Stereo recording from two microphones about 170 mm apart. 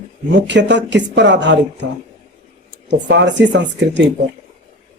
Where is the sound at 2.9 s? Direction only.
90° right.